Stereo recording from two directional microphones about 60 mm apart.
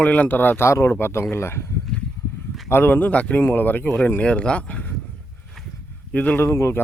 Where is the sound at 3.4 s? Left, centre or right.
Left.